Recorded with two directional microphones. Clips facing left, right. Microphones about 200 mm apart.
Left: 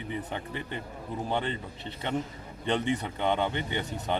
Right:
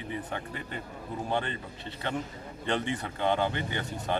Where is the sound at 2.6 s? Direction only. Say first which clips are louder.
Left 3 dB; 20° left (ahead or behind).